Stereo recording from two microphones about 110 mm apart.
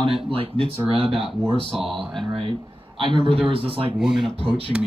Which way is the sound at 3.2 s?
55° right (ahead or behind).